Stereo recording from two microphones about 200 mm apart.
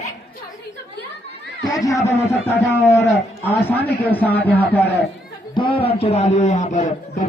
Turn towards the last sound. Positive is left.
turn(degrees=35)  # may be behind; listen again after turning